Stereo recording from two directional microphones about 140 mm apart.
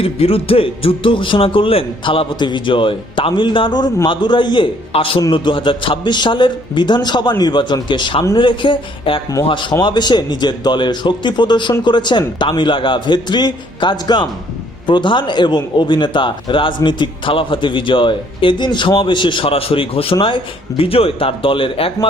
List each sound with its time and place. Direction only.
0.0 s a man's voice: 45° left (ahead or behind)